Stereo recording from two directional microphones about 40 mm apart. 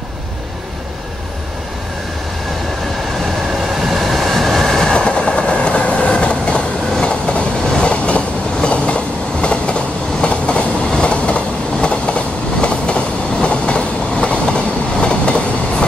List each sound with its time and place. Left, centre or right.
3.9 s train: centre; by 15.3 s left